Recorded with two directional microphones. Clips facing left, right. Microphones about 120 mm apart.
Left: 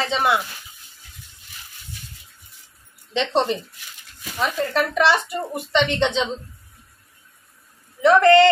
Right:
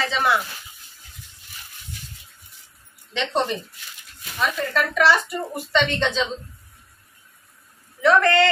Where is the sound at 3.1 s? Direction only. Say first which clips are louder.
Left 3 dB; 25° left (ahead or behind).